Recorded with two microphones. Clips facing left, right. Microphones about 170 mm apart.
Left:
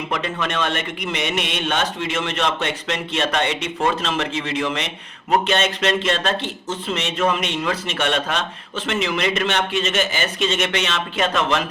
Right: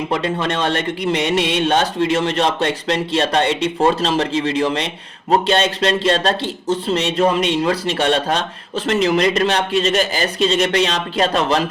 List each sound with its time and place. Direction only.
0.1 s speech: 35° right (ahead or behind)